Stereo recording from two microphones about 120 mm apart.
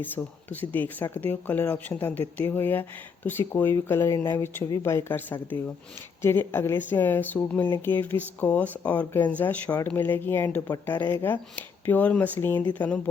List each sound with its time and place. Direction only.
0.0 s speech: 15° left (ahead or behind)